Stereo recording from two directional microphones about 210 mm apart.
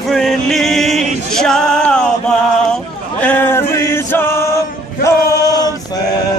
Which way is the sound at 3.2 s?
10° left (ahead or behind).